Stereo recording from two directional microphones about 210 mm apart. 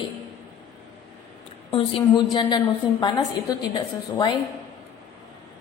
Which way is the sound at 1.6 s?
25° left (ahead or behind).